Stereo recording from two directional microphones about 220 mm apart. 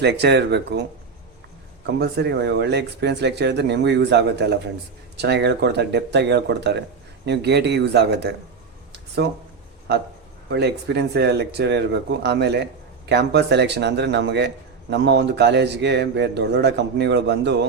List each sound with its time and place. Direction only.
0.0 s a man's voice: 50° right (ahead or behind)
2.0 s a man's voice: 50° right (ahead or behind)
8.9 s a sound: 50° right (ahead or behind)
10.5 s a man's voice: 50° right (ahead or behind)